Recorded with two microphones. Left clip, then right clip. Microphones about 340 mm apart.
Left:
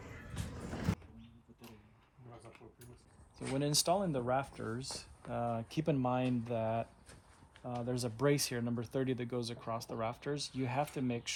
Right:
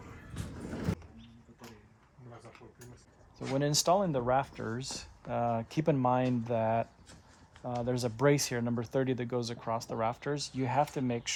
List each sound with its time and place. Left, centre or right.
0.0 s music: centre
3.3 s speech: right